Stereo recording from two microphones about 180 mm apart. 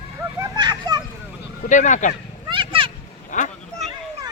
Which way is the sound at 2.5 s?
30° right (ahead or behind).